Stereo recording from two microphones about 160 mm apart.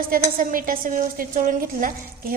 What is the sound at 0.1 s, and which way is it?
A woman's voice, 60° right (ahead or behind).